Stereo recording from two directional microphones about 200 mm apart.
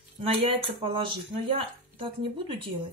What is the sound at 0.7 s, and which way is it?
Speech, 30° right (ahead or behind).